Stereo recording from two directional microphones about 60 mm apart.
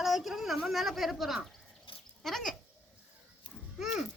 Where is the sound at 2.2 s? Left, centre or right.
Centre.